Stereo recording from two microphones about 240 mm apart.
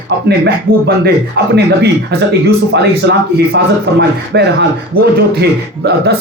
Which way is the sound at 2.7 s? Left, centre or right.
Right.